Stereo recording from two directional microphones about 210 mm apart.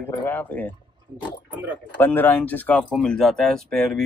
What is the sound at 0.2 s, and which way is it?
Speech, 10° left (ahead or behind).